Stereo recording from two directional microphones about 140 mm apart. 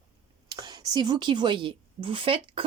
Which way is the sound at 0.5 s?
30° right (ahead or behind).